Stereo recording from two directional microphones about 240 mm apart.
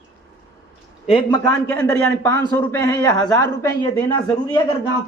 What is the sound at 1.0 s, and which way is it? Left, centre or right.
Speech, left.